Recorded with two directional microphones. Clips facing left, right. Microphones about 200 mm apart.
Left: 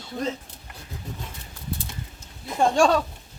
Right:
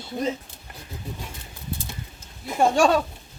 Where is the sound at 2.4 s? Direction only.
5° right (ahead or behind).